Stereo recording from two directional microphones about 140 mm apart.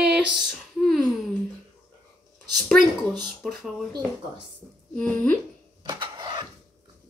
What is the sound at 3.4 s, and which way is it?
Speech, centre (ahead or behind).